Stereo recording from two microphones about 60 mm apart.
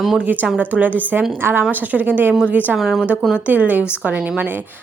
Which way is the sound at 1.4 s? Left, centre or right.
Right.